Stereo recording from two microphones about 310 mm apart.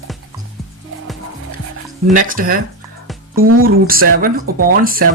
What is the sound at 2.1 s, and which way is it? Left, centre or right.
Speech, right.